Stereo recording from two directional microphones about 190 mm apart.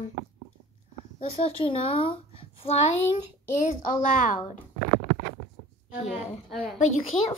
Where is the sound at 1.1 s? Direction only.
30° left (ahead or behind).